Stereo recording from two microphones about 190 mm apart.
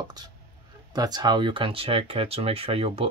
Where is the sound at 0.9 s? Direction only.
20° right (ahead or behind).